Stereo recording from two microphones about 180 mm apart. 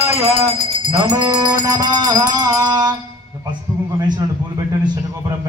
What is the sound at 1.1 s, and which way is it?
A man's voice, 20° right (ahead or behind).